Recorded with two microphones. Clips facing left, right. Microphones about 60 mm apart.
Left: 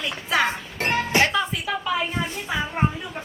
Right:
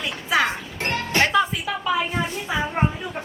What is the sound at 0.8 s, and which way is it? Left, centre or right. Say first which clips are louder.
Music: left 2 dB; centre.